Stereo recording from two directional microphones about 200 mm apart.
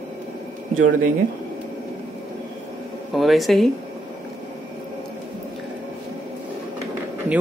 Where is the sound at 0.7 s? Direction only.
90° right.